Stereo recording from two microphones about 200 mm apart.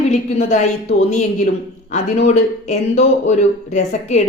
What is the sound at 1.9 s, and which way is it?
Speech, 35° left (ahead or behind).